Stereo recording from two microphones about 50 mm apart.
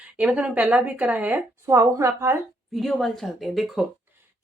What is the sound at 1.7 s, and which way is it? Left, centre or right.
Speech, right.